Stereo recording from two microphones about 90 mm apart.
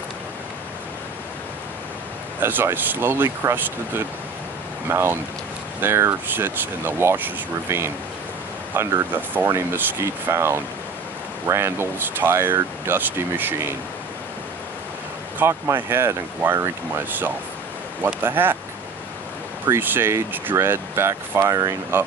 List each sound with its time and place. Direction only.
2.4 s speech: 25° right (ahead or behind)
15.3 s speech: 25° right (ahead or behind)
19.6 s speech: 25° right (ahead or behind)